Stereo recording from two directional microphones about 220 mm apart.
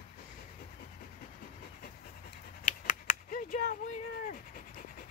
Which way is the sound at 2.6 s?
35° left (ahead or behind).